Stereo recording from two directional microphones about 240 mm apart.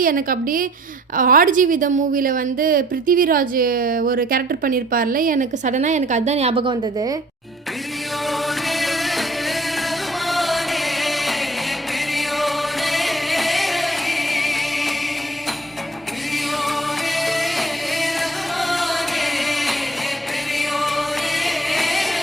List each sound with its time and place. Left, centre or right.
0.0 s a woman's voice: right; by 7.2 s centre
8.3 s music: centre
16.3 s music: centre